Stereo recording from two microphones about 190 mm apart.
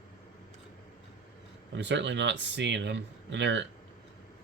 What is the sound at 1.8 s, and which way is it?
Speech, 70° right (ahead or behind).